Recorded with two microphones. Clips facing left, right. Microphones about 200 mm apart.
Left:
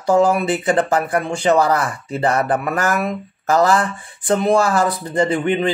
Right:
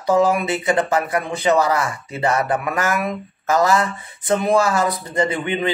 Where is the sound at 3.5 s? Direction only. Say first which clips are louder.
Left 2 dB; 35° left (ahead or behind).